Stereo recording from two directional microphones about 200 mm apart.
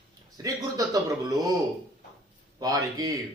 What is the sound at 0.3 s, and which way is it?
Speech, 15° right (ahead or behind).